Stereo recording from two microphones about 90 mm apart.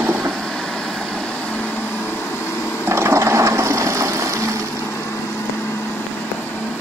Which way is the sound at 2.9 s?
30° right (ahead or behind).